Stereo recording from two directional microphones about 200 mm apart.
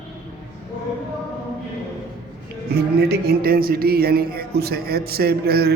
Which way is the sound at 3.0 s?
50° right (ahead or behind).